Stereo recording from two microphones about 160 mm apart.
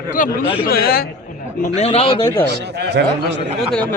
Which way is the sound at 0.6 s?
70° left (ahead or behind).